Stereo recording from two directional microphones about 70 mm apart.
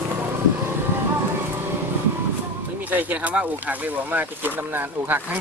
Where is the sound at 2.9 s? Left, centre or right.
Right.